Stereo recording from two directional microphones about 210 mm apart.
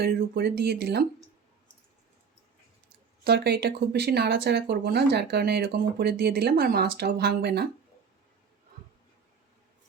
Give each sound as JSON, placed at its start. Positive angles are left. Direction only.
{"t": 0.0, "sound": "speech", "side_deg": -50}
{"t": 3.2, "sound": "speech", "side_deg": -50}